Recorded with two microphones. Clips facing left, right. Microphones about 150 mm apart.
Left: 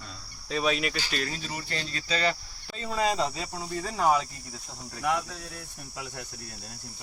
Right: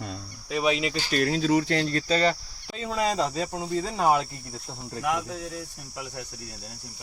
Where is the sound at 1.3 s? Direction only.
90° right; by 2.3 s 45° right (ahead or behind).